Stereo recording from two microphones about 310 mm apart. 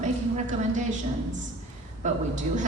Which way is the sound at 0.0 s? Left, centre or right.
Right.